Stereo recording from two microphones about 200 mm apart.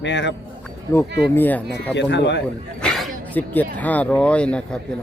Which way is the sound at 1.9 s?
60° left (ahead or behind).